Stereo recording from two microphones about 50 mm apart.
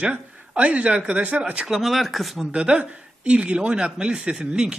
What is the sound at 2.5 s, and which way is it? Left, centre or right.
Speech, right.